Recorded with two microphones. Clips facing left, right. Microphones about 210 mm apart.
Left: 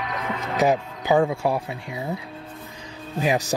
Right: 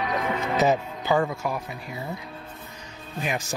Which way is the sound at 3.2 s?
35° left (ahead or behind).